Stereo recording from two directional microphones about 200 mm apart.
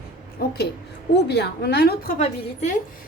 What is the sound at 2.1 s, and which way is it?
Speech, 35° left (ahead or behind).